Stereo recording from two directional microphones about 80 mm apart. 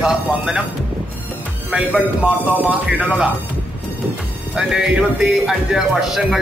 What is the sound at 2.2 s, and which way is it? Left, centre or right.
A man's voice, centre.